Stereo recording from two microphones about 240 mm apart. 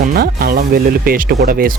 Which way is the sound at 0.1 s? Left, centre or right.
Right.